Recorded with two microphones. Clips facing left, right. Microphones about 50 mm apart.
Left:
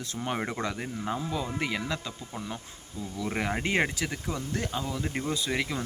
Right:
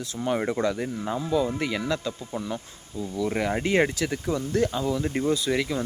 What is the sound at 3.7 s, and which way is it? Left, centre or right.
Speech, left.